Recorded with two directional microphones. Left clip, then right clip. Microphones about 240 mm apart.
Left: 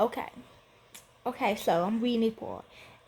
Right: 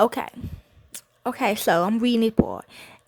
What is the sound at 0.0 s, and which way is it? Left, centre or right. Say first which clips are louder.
Speech: right 8 dB; right.